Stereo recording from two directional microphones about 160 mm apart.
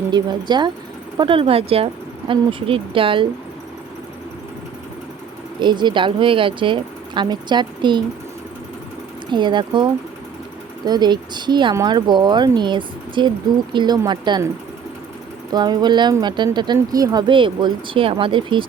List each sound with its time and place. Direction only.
0.1 s speech: 25° right (ahead or behind)
5.5 s speech: 30° right (ahead or behind)
9.3 s speech: 30° right (ahead or behind)
15.5 s speech: 25° right (ahead or behind)